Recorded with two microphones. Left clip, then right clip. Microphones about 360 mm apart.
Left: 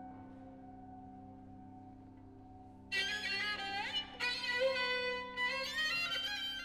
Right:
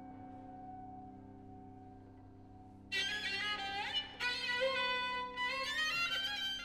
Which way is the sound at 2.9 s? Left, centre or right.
Left.